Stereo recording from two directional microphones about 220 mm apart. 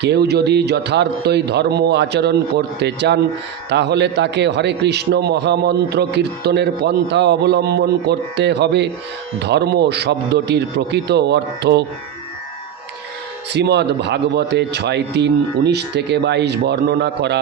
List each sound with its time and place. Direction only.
0.0 s a man's voice: 50° right (ahead or behind)
13.5 s a man's voice: 50° right (ahead or behind)